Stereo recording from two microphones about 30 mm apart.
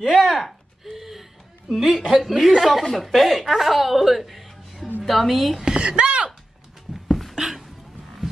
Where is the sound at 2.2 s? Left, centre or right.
Centre.